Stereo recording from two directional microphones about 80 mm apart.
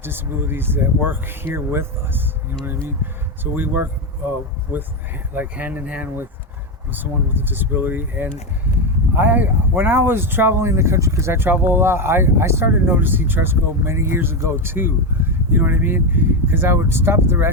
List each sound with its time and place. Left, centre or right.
0.0 s speech: right
5.3 s speech: right